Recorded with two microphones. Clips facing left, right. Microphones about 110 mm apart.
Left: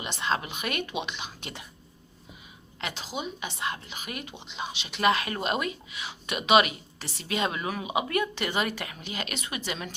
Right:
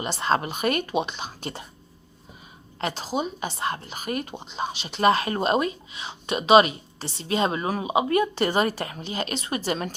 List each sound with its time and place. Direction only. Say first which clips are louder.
0.0 s speech: right 5 dB; 40° right (ahead or behind)
2.8 s speech: right 7 dB; 40° right (ahead or behind)